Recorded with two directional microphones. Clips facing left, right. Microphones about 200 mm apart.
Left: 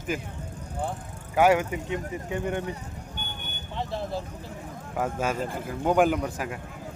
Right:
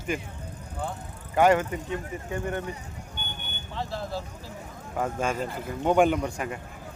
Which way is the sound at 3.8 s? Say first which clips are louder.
Left 1 dB; 20° left (ahead or behind).